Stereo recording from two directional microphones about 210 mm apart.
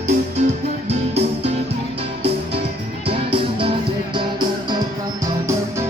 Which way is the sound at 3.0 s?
25° right (ahead or behind).